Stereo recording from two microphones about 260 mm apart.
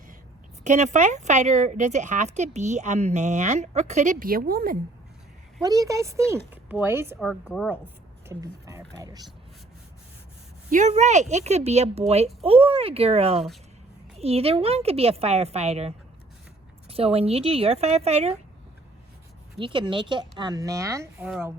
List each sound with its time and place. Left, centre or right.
0.6 s a woman's voice: right
5.6 s a woman's voice: centre
8.3 s speech: centre
10.7 s a woman's voice: right
19.5 s speech: centre